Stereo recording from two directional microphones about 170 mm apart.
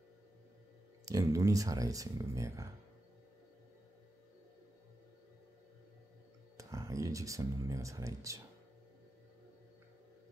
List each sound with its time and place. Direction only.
1.0 s speech: 20° right (ahead or behind)
6.5 s speech: 20° right (ahead or behind)